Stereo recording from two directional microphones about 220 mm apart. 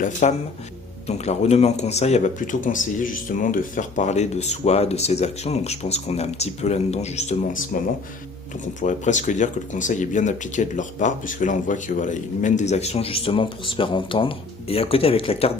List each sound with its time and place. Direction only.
0.0 s speech: 35° left (ahead or behind)
8.8 s speech: 35° left (ahead or behind)